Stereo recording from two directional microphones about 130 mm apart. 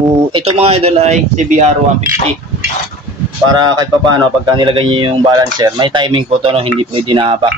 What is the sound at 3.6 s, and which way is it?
Speech, 35° right (ahead or behind).